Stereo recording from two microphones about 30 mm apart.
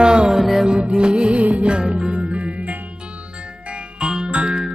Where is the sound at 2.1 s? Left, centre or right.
Right.